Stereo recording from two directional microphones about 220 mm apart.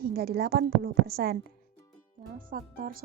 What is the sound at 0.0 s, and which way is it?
Speech, 45° right (ahead or behind).